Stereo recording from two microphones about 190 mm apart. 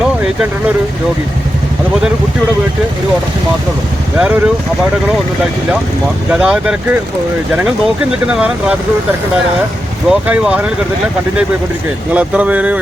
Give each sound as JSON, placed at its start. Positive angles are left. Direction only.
{"t": 4.2, "sound": "speech", "side_deg": -5}
{"t": 6.3, "sound": "speech", "side_deg": -5}
{"t": 8.3, "sound": "speech", "side_deg": -5}
{"t": 10.1, "sound": "speech", "side_deg": -5}
{"t": 12.1, "sound": "speech", "side_deg": -5}